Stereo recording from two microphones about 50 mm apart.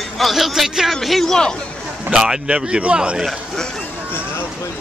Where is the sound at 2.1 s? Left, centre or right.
Centre.